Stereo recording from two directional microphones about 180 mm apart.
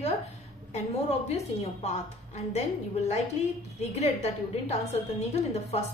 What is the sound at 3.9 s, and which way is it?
A woman's voice, 35° left (ahead or behind).